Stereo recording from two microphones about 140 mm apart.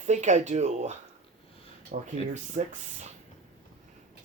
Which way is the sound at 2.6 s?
60° right (ahead or behind).